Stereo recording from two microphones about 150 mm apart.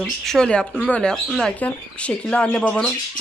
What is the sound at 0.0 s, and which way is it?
Speech, centre (ahead or behind).